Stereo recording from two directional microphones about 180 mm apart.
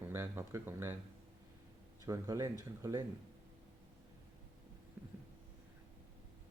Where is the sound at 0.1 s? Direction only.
15° right (ahead or behind).